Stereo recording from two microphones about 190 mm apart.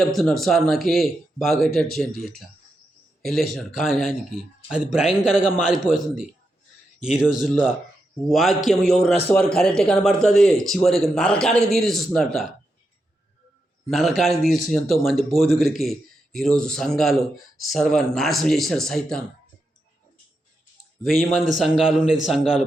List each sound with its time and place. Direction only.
0.0 s a man's voice: centre (ahead or behind)
7.0 s a man's voice: 5° right (ahead or behind)
13.9 s a man's voice: centre (ahead or behind)
21.0 s a man's voice: centre (ahead or behind)